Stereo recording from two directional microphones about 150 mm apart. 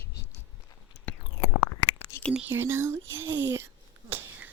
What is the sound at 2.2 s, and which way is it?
Whispering, 5° left (ahead or behind).